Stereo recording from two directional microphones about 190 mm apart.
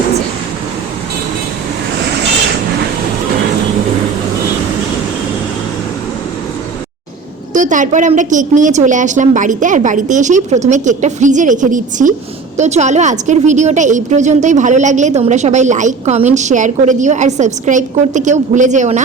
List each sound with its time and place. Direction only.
7.5 s a woman's voice: 40° right (ahead or behind)